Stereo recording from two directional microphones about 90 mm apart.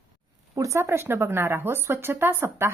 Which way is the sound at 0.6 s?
35° right (ahead or behind).